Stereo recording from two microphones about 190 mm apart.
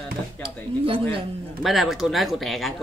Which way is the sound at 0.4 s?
30° right (ahead or behind).